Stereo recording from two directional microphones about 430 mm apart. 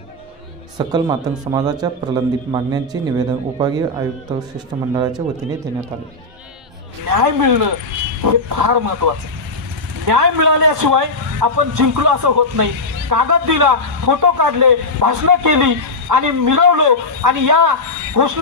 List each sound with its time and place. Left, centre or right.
0.7 s a man's voice: centre
4.9 s speech: centre
7.1 s a man's voice: right